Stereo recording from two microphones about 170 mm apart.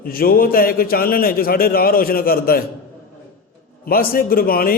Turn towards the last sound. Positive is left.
turn(degrees=60)  # may be behind; listen again after turning